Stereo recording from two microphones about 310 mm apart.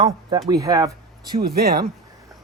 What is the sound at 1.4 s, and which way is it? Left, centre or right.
Speech, right.